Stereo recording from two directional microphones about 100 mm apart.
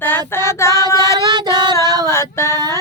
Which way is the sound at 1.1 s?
45° right (ahead or behind).